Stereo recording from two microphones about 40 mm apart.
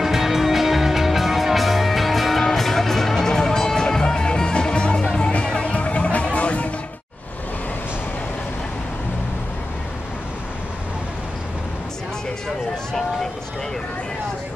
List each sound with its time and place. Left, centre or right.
0.0 s music: centre; by 6.7 s left